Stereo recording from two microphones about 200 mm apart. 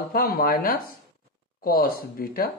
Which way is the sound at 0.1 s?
50° left (ahead or behind).